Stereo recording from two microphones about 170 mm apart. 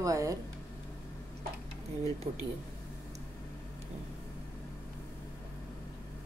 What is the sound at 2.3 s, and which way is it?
Speech, 35° right (ahead or behind).